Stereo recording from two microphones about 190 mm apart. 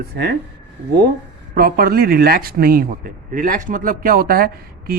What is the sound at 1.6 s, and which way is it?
Speech, 50° right (ahead or behind).